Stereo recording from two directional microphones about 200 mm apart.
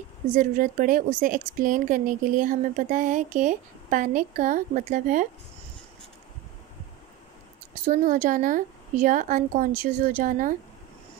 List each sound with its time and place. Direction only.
0.4 s a woman's voice: 40° right (ahead or behind)
7.8 s a woman's voice: 45° right (ahead or behind)